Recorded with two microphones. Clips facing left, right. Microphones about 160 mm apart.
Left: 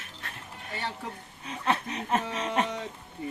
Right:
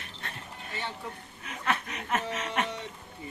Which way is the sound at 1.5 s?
30° left (ahead or behind).